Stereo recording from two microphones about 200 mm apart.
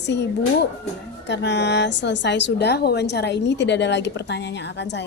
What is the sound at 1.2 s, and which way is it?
A woman's voice, 60° left (ahead or behind).